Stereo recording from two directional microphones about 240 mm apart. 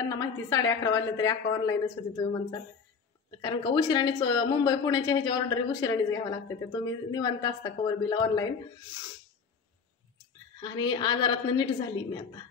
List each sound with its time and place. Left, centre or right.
0.1 s speech: centre
10.6 s speech: centre